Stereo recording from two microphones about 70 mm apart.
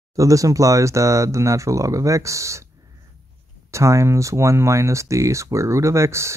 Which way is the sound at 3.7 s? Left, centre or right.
Right.